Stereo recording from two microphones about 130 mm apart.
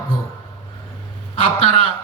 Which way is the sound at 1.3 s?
50° left (ahead or behind).